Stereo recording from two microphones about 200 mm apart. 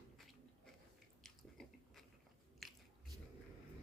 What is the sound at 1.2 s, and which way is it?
Biting, centre (ahead or behind).